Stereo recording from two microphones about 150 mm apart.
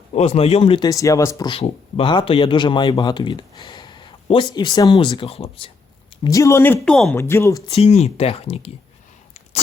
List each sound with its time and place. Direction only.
0.1 s speech: 45° left (ahead or behind)
0.9 s speech: 20° left (ahead or behind)
1.5 s speech: 40° left (ahead or behind)
6.2 s speech: 20° left (ahead or behind)
6.7 s speech: 5° left (ahead or behind)
7.2 s speech: 20° left (ahead or behind)
7.7 s speech: 45° left (ahead or behind)